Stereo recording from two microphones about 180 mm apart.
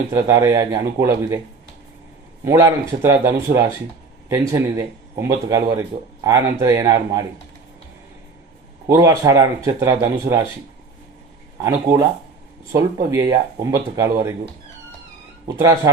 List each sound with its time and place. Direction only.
0.1 s speech: 15° right (ahead or behind)
2.4 s speech: 15° right (ahead or behind)
5.1 s speech: 15° right (ahead or behind)
8.9 s speech: 20° right (ahead or behind)
11.6 s speech: 15° right (ahead or behind)
15.4 s speech: 20° right (ahead or behind)